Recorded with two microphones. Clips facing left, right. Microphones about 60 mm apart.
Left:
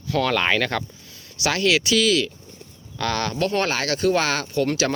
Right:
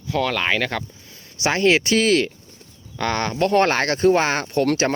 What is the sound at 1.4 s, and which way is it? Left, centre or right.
Speech, right.